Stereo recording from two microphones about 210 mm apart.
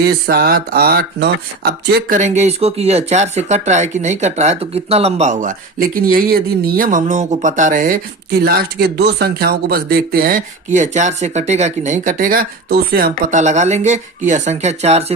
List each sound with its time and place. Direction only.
0.0 s speech: 45° right (ahead or behind); by 15.0 s 30° right (ahead or behind)